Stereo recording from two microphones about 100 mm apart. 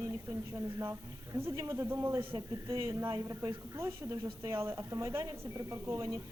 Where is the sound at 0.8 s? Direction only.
25° right (ahead or behind).